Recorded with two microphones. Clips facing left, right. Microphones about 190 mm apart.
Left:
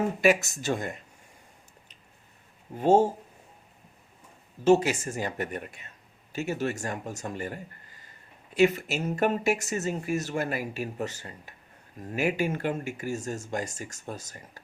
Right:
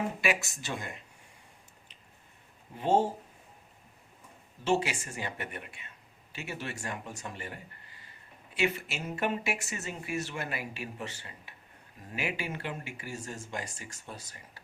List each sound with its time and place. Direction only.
0.2 s speech: 45° left (ahead or behind)
2.7 s speech: 45° left (ahead or behind)
4.6 s speech: 45° left (ahead or behind)